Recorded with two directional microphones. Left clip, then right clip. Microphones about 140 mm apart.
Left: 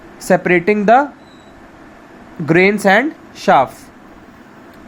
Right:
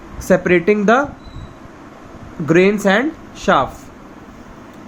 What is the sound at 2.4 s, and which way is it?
Speech, 40° left (ahead or behind).